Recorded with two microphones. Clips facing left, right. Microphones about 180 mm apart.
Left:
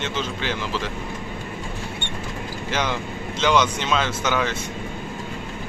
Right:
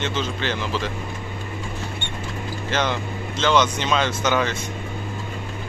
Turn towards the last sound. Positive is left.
turn(degrees=5)  # may be behind; listen again after turning